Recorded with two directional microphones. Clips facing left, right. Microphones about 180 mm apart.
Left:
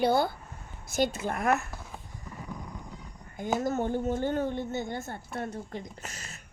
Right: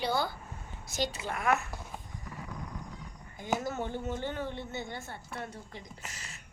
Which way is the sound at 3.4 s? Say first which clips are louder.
Left 5 dB; 45° left (ahead or behind).